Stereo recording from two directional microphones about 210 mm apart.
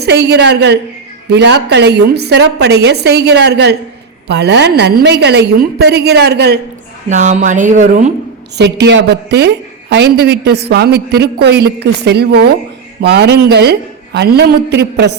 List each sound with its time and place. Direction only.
0.0 s a man's voice: 50° right (ahead or behind)
7.1 s a sound: 35° right (ahead or behind)
8.5 s a man's voice: 55° right (ahead or behind)